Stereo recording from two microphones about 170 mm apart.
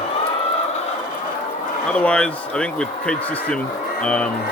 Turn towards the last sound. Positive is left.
turn(degrees=5)  # may be behind; listen again after turning